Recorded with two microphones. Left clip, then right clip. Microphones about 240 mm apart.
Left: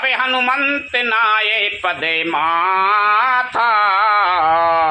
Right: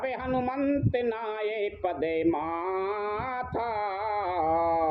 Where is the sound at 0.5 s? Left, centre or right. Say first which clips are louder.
Left 11 dB; left.